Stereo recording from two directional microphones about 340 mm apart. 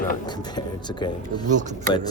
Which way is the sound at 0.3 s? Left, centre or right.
Centre.